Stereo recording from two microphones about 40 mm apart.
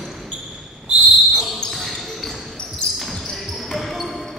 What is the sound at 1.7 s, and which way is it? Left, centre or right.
Basketball bounce, centre.